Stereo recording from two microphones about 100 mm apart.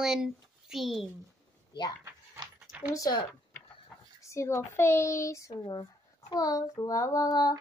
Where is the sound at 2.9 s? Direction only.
35° left (ahead or behind).